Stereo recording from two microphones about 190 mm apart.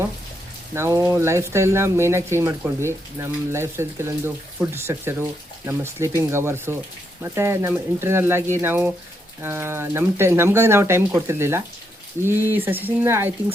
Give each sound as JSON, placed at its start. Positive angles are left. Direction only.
{"t": 0.7, "sound": "speech", "side_deg": -15}